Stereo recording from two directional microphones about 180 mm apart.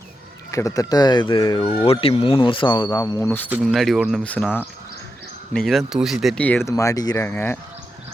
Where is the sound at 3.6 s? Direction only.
Centre (ahead or behind).